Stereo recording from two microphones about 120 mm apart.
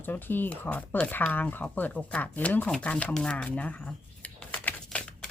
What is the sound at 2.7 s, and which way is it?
Shuffling cards, 10° left (ahead or behind).